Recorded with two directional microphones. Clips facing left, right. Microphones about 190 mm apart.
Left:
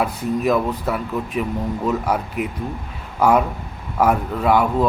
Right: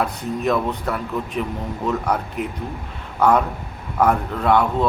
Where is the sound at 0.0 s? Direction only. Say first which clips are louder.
Left 2 dB; 5° left (ahead or behind).